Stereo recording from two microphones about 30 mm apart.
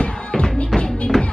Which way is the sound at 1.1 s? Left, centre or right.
Centre.